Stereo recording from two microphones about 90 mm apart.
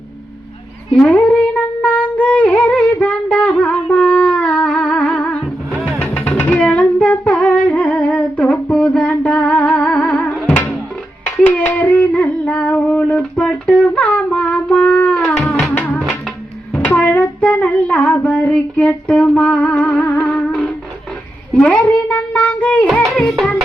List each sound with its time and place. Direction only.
0.9 s music: 15° left (ahead or behind)
9.8 s music: 5° left (ahead or behind)
11.3 s a sound: 15° left (ahead or behind)
15.2 s music: 20° left (ahead or behind)
16.8 s child singing: 20° left (ahead or behind)
18.5 s music: 15° left (ahead or behind)
21.5 s a child's voice: 10° left (ahead or behind)
22.1 s child singing: 20° left (ahead or behind)
23.4 s music: centre (ahead or behind)